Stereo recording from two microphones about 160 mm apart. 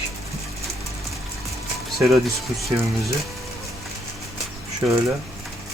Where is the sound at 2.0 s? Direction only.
Centre (ahead or behind).